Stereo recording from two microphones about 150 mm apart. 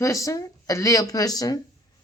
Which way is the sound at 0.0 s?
20° left (ahead or behind).